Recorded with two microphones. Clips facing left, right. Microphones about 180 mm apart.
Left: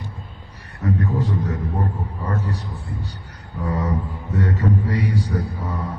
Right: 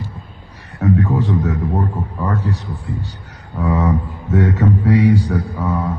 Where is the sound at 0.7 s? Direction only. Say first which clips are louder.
Right 6 dB; 75° right (ahead or behind).